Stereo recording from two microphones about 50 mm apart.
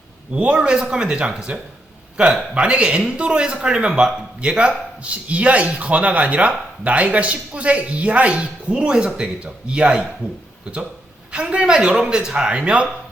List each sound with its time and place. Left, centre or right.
0.3 s a man's voice: right
11.3 s a man's voice: right